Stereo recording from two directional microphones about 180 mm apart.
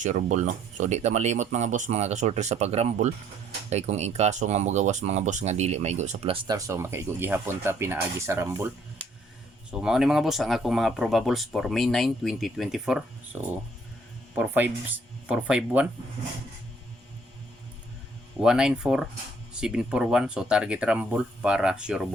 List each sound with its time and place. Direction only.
0.0 s speech: 45° right (ahead or behind)
6.5 s speech: 15° right (ahead or behind)
9.7 s speech: 5° right (ahead or behind)
14.3 s speech: 10° right (ahead or behind)
18.3 s speech: 5° right (ahead or behind)